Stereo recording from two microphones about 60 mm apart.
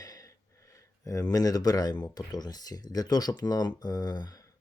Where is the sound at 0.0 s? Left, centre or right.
Left.